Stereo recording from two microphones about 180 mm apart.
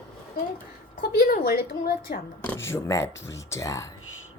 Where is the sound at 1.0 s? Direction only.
55° left (ahead or behind).